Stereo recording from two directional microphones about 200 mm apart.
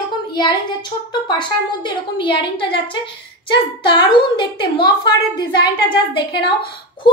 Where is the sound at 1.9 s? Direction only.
25° left (ahead or behind).